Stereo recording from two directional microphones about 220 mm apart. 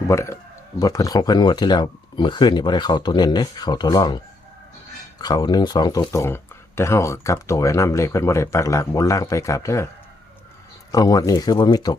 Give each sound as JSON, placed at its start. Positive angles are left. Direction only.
{"t": 0.1, "sound": "speech", "side_deg": 10}
{"t": 5.2, "sound": "speech", "side_deg": 20}
{"t": 10.9, "sound": "speech", "side_deg": 15}